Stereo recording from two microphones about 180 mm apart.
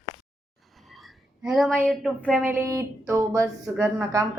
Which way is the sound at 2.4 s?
15° right (ahead or behind).